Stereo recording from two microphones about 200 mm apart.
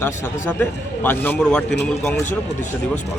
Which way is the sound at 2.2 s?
35° left (ahead or behind).